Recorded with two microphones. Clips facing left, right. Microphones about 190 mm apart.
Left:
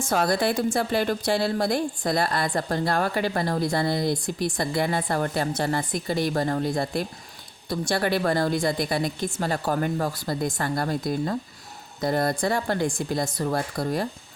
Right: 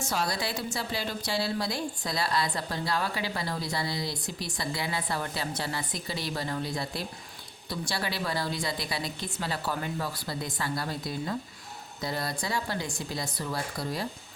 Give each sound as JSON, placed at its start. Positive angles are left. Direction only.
{"t": 0.0, "sound": "a woman's voice", "side_deg": 50}